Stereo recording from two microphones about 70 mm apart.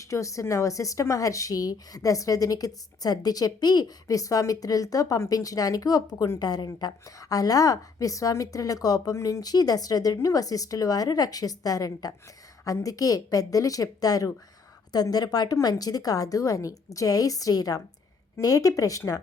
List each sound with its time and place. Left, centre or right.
0.0 s speech: left
9.4 s speech: left
15.0 s speech: left